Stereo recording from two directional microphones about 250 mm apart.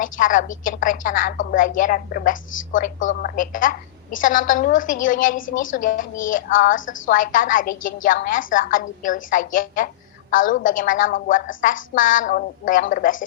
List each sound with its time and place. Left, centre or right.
0.0 s a woman's voice: left